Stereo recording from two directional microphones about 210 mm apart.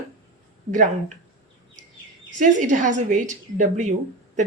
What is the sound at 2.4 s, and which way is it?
Speech, 35° right (ahead or behind).